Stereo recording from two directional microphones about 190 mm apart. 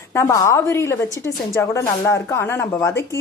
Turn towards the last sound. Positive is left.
turn(degrees=15)  # may be behind; listen again after turning